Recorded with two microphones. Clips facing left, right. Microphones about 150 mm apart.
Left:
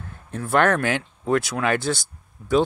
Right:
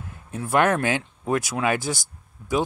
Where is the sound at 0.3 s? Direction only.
15° right (ahead or behind).